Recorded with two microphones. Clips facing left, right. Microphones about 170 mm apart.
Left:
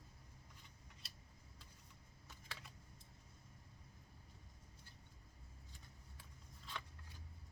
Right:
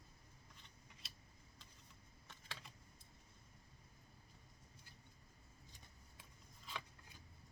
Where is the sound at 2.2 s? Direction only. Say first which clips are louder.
Even; 5° left (ahead or behind).